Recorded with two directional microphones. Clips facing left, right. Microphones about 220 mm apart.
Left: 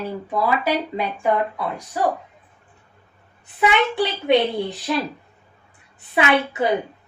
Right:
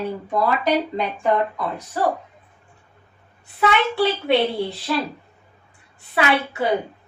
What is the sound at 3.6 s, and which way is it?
A child's voice, 20° left (ahead or behind).